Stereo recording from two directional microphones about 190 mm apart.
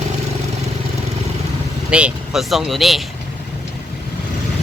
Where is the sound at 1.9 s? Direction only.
5° right (ahead or behind).